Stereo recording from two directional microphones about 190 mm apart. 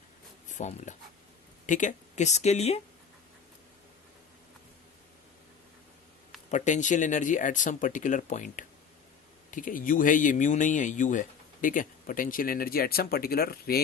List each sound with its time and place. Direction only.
0.4 s speech: 40° left (ahead or behind)
6.5 s speech: 40° left (ahead or behind)